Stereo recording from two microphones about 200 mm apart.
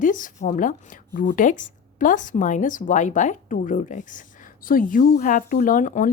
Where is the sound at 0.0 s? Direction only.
40° left (ahead or behind).